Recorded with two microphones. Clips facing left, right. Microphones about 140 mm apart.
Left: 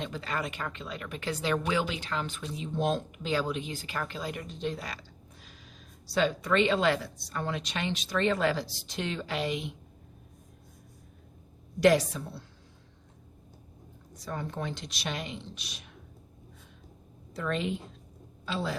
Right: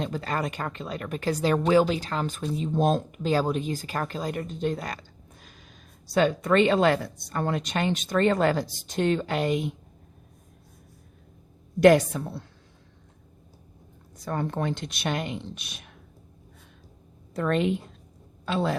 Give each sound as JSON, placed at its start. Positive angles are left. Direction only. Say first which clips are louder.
{"t": 0.0, "sound": "speech", "louder": "right 5 dB", "side_deg": -45}
{"t": 11.8, "sound": "speech", "louder": "right 6 dB", "side_deg": -55}
{"t": 14.3, "sound": "speech", "louder": "right 7 dB", "side_deg": -55}
{"t": 17.3, "sound": "speech", "louder": "right 7 dB", "side_deg": -55}